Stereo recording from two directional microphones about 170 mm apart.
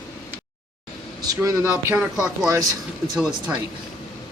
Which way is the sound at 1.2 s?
20° right (ahead or behind).